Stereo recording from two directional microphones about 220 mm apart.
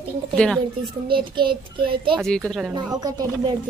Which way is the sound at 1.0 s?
20° right (ahead or behind).